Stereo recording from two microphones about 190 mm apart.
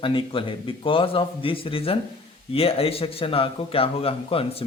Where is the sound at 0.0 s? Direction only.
30° left (ahead or behind).